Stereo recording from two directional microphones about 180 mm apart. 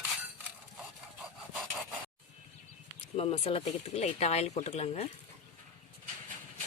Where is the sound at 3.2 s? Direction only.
35° left (ahead or behind).